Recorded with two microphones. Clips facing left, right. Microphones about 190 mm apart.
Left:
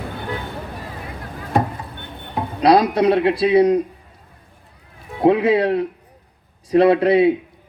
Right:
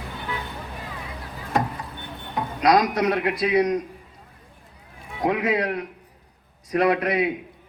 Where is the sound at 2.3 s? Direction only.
30° left (ahead or behind).